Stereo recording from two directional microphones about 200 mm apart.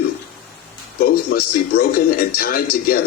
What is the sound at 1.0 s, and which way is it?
Speech, 50° left (ahead or behind).